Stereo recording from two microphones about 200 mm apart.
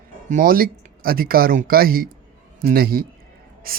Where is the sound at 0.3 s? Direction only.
45° right (ahead or behind).